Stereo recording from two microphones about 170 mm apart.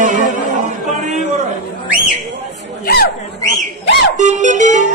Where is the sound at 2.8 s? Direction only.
65° left (ahead or behind).